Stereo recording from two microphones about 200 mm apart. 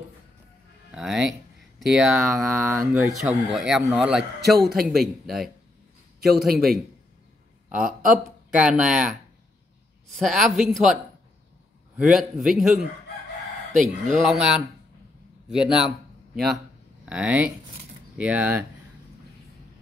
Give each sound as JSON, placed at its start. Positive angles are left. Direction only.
{"t": 0.9, "sound": "speech", "side_deg": 0}
{"t": 7.8, "sound": "speech", "side_deg": -45}
{"t": 8.5, "sound": "speech", "side_deg": -5}
{"t": 10.1, "sound": "speech", "side_deg": 0}
{"t": 12.0, "sound": "speech", "side_deg": 0}
{"t": 13.7, "sound": "speech", "side_deg": -40}
{"t": 14.2, "sound": "speech", "side_deg": -5}